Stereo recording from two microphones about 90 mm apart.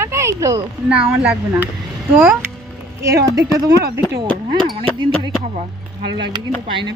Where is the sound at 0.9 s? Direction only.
10° right (ahead or behind).